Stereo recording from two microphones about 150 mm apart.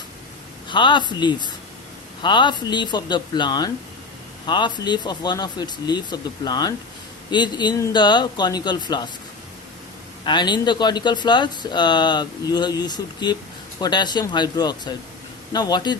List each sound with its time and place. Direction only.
0.7 s a man's voice: 30° left (ahead or behind)
10.2 s speech: 30° left (ahead or behind)